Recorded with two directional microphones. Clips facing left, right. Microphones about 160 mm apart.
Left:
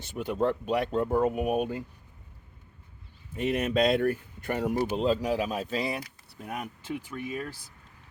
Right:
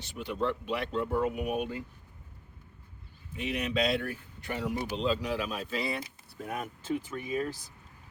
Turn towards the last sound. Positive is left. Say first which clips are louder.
# right 2 dB
turn(degrees=5)  # may be behind; listen again after turning